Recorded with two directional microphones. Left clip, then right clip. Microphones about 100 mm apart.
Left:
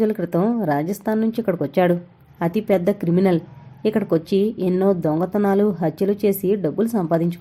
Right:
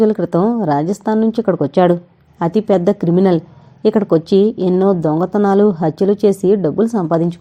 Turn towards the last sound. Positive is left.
turn(degrees=-35)  # may be behind; listen again after turning